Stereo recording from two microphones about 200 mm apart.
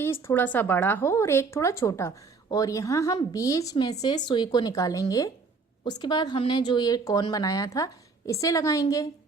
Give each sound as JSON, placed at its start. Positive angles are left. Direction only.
{"t": 0.0, "sound": "speech", "side_deg": 10}